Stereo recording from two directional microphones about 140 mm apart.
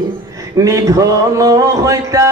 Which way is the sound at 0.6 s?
25° right (ahead or behind).